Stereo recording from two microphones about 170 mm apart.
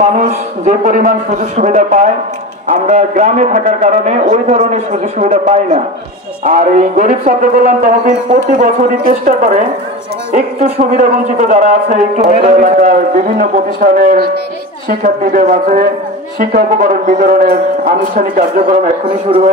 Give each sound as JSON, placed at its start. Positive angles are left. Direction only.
{"t": 0.7, "sound": "a man's voice", "side_deg": -50}
{"t": 19.3, "sound": "a man's voice", "side_deg": -30}